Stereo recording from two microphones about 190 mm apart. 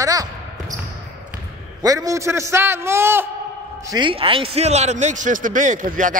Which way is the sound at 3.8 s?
25° right (ahead or behind).